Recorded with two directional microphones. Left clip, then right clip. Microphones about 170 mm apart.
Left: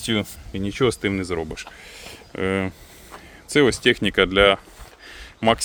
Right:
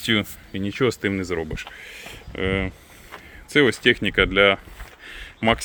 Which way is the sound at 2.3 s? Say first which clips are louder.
Left 1 dB; 15° left (ahead or behind).